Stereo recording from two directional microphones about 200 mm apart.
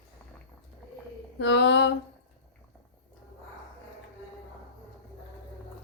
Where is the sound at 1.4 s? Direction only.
60° left (ahead or behind).